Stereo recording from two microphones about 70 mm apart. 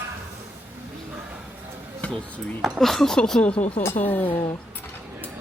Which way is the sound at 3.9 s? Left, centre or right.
Left.